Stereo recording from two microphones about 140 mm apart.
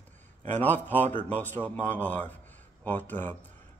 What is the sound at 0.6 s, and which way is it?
A man's voice, 15° left (ahead or behind).